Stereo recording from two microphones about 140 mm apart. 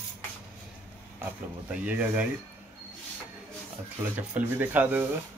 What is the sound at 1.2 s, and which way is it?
Speech, 10° right (ahead or behind).